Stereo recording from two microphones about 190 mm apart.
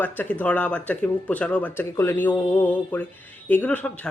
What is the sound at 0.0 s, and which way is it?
Speech, 10° left (ahead or behind).